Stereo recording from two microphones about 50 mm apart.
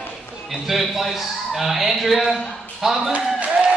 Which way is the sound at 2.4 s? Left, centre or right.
Centre.